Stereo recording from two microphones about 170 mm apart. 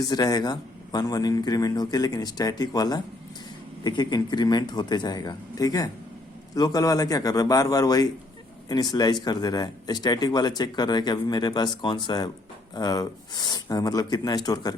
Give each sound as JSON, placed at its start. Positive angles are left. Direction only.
{"t": 0.0, "sound": "speech", "side_deg": 25}